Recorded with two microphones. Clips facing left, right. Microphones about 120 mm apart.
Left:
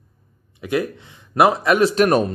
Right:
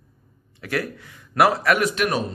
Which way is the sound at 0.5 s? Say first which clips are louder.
Left 5 dB; 20° left (ahead or behind).